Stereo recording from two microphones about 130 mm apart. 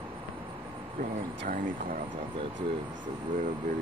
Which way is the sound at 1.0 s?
90° right.